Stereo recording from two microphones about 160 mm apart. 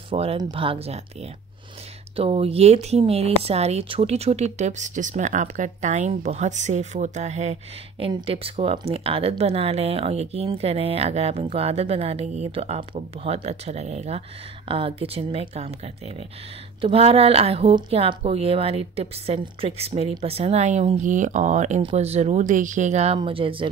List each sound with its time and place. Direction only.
0.1 s speech: 40° right (ahead or behind)
23.1 s speech: 35° right (ahead or behind)